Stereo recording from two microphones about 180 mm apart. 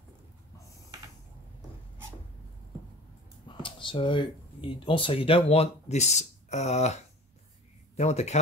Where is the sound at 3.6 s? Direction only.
25° left (ahead or behind).